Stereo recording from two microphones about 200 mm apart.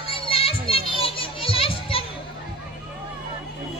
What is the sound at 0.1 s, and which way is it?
Children playing, 30° left (ahead or behind).